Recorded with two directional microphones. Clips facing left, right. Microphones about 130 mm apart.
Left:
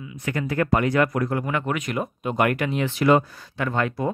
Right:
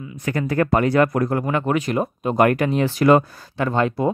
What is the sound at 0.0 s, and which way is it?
Speech, 40° right (ahead or behind).